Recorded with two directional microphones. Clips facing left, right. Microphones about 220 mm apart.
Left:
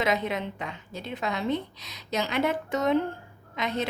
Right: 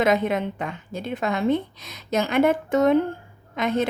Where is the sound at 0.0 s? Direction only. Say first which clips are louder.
Right 6 dB; 50° right (ahead or behind).